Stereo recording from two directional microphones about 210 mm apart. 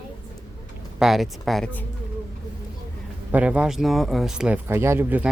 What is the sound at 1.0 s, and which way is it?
Speech, centre (ahead or behind).